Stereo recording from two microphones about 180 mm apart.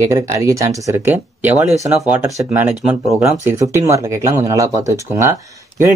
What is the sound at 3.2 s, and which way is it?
Speech, 15° right (ahead or behind).